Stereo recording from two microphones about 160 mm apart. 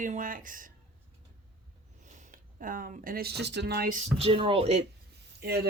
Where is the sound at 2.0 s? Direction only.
50° right (ahead or behind); by 4.0 s 80° right.